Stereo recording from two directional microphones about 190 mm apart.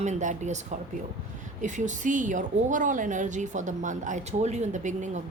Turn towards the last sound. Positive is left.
turn(degrees=-40)  # may be behind; listen again after turning